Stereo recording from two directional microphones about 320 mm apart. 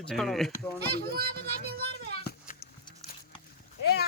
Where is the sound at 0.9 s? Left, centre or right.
Right.